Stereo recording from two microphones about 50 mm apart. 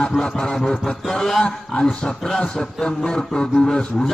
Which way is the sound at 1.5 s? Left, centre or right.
Centre.